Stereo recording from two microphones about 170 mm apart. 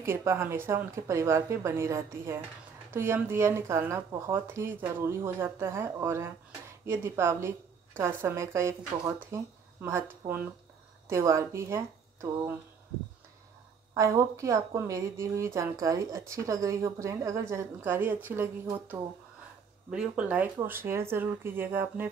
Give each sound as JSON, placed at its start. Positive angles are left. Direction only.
{"t": 0.0, "sound": "a woman's voice", "side_deg": -15}
{"t": 13.9, "sound": "a woman's voice", "side_deg": -20}